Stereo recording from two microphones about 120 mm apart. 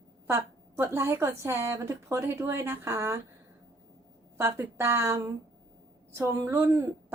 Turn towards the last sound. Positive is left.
turn(degrees=-25)  # may be behind; listen again after turning